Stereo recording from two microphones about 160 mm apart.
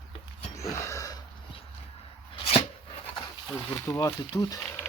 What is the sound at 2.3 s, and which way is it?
Chopping, 35° left (ahead or behind).